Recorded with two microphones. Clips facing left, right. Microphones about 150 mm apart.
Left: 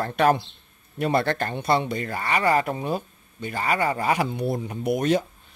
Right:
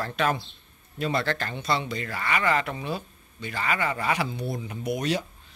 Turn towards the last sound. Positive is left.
turn(degrees=50)  # may be behind; listen again after turning